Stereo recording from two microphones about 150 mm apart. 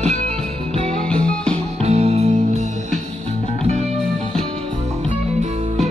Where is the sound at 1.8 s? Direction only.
45° right (ahead or behind).